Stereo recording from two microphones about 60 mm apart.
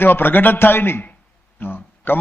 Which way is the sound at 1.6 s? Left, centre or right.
Left.